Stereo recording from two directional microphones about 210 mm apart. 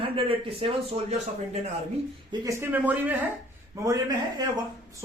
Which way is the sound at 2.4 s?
10° right (ahead or behind).